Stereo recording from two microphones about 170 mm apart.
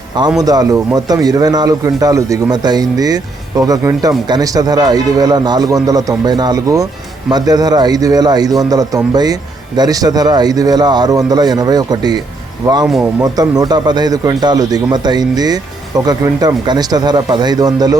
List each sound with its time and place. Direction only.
0.3 s a man's voice: 20° right (ahead or behind)